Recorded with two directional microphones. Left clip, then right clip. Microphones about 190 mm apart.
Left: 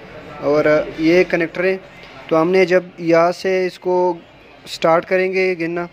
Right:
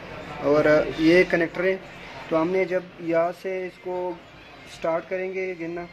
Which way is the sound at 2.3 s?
35° left (ahead or behind).